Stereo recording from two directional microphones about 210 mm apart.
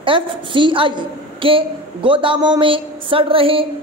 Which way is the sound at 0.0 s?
25° right (ahead or behind).